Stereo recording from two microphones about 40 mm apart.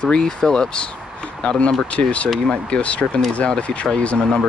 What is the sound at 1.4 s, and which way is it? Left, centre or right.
Speech, left.